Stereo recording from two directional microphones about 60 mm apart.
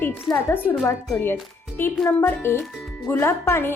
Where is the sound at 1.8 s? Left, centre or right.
Left.